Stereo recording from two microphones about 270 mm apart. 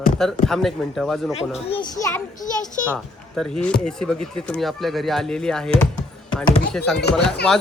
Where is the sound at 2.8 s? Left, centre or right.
Centre.